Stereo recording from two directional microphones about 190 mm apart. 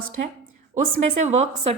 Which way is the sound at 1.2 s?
35° right (ahead or behind).